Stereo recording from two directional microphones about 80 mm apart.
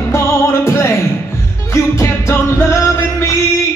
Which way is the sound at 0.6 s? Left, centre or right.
Left.